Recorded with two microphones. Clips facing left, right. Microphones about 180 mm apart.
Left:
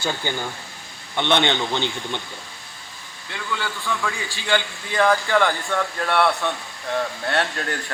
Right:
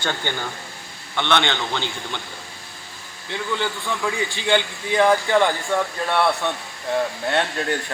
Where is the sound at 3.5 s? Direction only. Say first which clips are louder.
Even; 20° right (ahead or behind).